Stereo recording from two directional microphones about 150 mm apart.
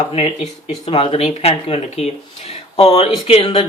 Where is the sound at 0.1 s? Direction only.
40° left (ahead or behind).